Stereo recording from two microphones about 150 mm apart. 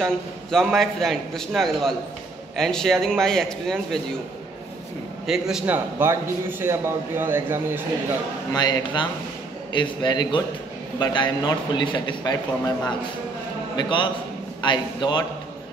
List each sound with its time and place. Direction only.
0.0 s a man's voice: 5° left (ahead or behind)
5.2 s a man's voice: 5° right (ahead or behind)
6.0 s speech: 15° right (ahead or behind)
8.5 s a man's voice: 30° left (ahead or behind)